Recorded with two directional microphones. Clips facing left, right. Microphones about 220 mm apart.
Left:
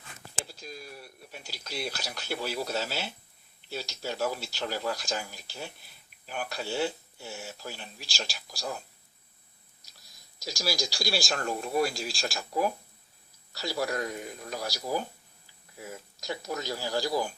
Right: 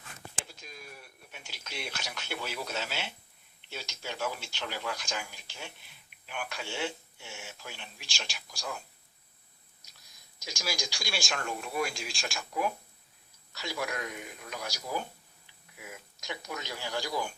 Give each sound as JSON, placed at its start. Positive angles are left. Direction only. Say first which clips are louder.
{"t": 0.4, "sound": "a sound", "louder": "left 5 dB", "side_deg": 35}
{"t": 3.7, "sound": "speech", "louder": "left 5 dB", "side_deg": 40}
{"t": 10.4, "sound": "speech", "louder": "left 5 dB", "side_deg": 35}